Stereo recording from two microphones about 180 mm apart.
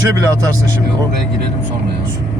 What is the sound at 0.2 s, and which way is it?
Speech, 20° right (ahead or behind).